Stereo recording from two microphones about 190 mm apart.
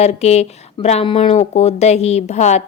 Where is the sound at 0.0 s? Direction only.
35° left (ahead or behind).